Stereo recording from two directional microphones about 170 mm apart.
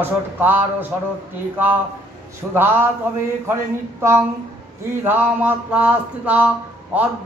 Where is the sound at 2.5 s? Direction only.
10° right (ahead or behind).